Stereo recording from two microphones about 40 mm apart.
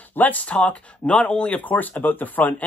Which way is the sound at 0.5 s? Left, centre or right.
Left.